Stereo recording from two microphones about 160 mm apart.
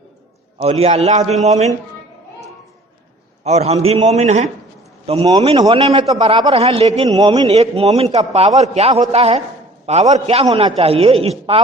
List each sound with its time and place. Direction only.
0.6 s a man's voice: 40° right (ahead or behind)
3.4 s a man's voice: 40° right (ahead or behind)
7.5 s a man's voice: 40° right (ahead or behind)